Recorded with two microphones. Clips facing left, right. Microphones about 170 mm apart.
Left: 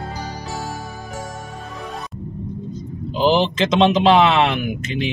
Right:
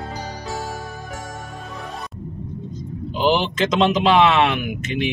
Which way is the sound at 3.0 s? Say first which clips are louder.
Left 2 dB; 35° left (ahead or behind).